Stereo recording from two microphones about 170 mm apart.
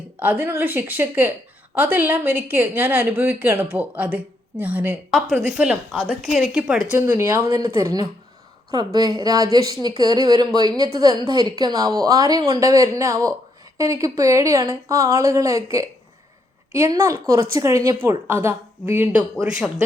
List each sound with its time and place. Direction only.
0.2 s a woman's voice: 10° right (ahead or behind)